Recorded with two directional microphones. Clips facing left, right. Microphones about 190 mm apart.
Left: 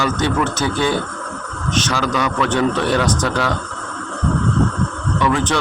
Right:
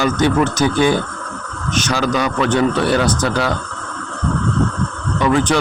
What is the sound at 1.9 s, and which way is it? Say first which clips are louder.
Speech: right 4 dB; 35° right (ahead or behind).